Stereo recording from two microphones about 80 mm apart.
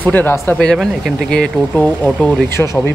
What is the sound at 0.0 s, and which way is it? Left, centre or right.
Speech, left.